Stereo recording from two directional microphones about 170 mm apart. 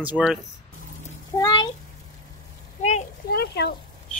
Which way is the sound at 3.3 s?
70° left (ahead or behind).